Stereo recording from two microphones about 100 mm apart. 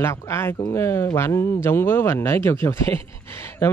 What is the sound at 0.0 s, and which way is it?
Speech, 30° left (ahead or behind).